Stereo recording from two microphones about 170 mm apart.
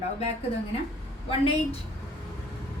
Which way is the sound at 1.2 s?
35° left (ahead or behind).